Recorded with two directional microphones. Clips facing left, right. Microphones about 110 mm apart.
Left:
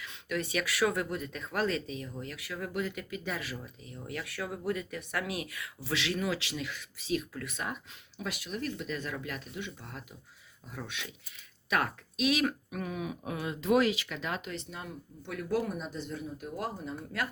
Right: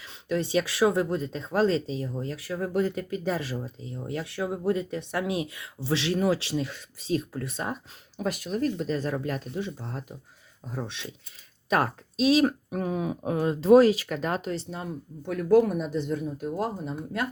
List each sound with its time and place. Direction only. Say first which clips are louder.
0.0 s speech: right 6 dB; 30° right (ahead or behind); by 16.5 s 45° right (ahead or behind)
16.6 s speech: right 3 dB; 25° right (ahead or behind)